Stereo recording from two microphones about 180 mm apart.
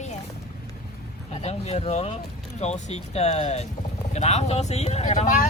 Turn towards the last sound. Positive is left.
turn(degrees=40)  # may be behind; listen again after turning